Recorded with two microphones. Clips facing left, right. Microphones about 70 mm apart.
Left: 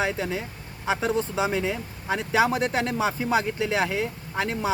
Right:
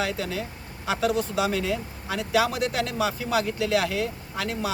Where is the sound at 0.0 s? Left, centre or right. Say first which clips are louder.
Left 1 dB; left.